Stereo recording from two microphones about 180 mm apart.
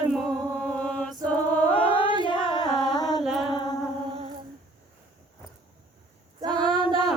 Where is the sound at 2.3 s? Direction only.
25° left (ahead or behind).